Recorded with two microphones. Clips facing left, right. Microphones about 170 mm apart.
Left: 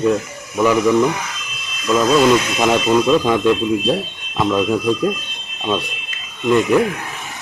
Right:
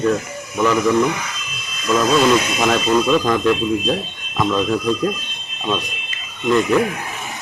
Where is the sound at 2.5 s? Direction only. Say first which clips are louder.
Left 2 dB; 15° left (ahead or behind).